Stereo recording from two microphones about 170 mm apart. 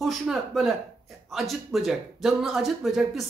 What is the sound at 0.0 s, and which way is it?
A woman's voice, centre (ahead or behind).